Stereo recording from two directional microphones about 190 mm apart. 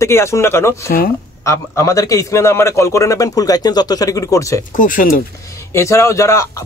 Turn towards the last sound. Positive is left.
turn(degrees=15)  # may be behind; listen again after turning